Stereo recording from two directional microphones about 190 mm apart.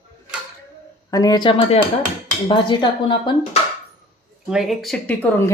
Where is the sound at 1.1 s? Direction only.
20° left (ahead or behind).